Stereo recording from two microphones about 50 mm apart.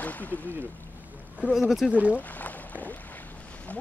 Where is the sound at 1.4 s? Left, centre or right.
Right.